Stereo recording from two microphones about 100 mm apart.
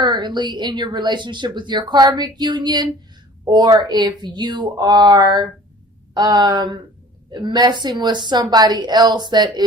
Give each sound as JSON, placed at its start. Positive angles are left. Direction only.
{"t": 0.0, "sound": "speech", "side_deg": -45}